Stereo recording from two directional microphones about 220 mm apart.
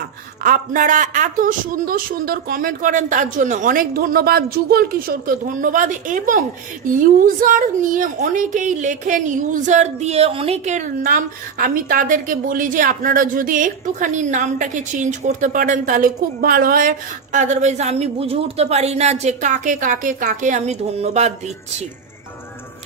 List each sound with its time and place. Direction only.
0.4 s a woman's voice: 40° right (ahead or behind)